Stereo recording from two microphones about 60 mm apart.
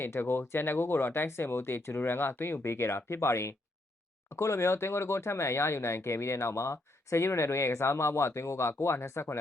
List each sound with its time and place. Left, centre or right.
0.0 s speech: left